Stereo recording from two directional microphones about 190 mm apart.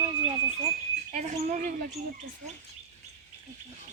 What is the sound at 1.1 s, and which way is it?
Speech, 40° right (ahead or behind).